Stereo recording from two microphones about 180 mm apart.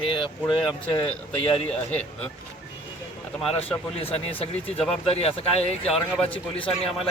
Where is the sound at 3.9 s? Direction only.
35° left (ahead or behind).